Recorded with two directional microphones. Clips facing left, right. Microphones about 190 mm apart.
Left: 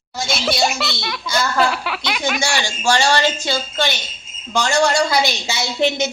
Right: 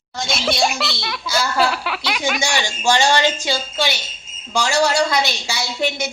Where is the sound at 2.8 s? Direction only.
20° right (ahead or behind); by 5.2 s centre (ahead or behind).